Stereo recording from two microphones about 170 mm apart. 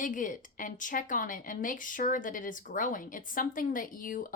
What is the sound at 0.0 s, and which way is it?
Speech, 50° left (ahead or behind).